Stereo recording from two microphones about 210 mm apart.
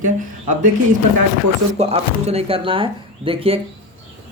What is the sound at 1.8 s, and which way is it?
Speech, 30° right (ahead or behind).